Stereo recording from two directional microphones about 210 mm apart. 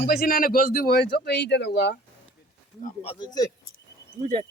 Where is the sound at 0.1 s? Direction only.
45° left (ahead or behind).